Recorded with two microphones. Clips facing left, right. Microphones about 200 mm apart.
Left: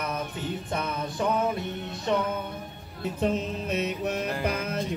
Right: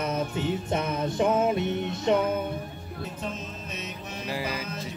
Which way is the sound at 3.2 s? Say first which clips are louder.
Left 8 dB; 60° left (ahead or behind).